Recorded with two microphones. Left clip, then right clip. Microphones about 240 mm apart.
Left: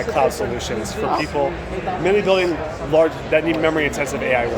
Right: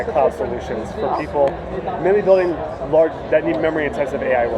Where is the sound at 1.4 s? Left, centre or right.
Left.